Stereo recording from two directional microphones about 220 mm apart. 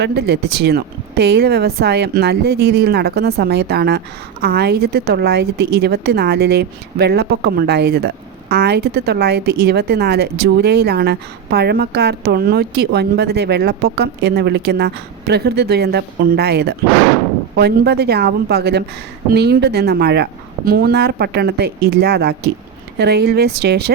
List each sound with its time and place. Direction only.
0.0 s speech: 50° right (ahead or behind)